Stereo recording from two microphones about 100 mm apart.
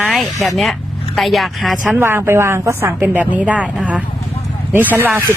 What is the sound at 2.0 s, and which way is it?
A woman's voice, 25° right (ahead or behind).